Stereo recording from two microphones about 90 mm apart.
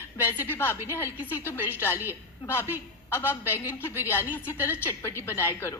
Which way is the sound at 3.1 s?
25° left (ahead or behind).